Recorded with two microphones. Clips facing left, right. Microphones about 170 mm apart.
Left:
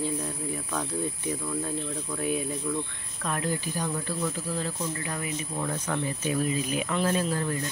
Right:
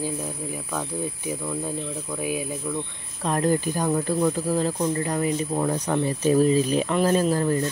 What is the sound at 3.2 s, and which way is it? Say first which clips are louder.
Speech: right 8 dB; 40° right (ahead or behind).